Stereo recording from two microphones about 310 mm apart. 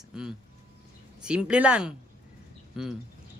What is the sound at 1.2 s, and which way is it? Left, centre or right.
Speech, centre.